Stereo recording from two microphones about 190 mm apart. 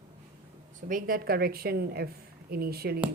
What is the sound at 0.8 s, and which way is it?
A woman's voice, 45° right (ahead or behind).